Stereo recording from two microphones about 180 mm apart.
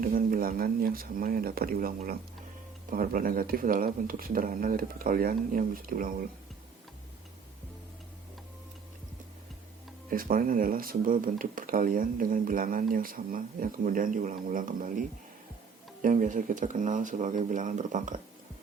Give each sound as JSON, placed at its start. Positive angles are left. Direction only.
{"t": 0.0, "sound": "speech", "side_deg": -50}
{"t": 2.9, "sound": "speech", "side_deg": -50}
{"t": 10.1, "sound": "speech", "side_deg": -50}